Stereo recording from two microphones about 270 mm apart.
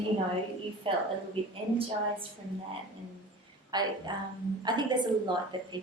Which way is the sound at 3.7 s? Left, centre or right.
Centre.